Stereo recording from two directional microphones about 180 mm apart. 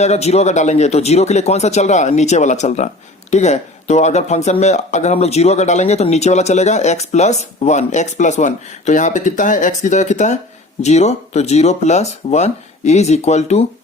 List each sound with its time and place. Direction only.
0.0 s speech: 40° left (ahead or behind)